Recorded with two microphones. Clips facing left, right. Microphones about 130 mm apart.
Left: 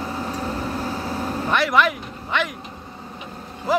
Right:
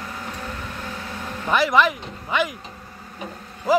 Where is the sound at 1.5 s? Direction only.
Centre (ahead or behind).